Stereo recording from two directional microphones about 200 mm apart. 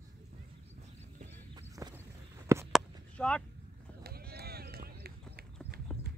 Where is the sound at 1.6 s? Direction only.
20° right (ahead or behind).